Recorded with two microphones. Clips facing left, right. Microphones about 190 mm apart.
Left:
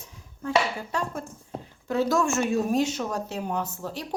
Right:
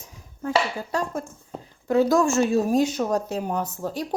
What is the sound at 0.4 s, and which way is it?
Speech, 40° right (ahead or behind).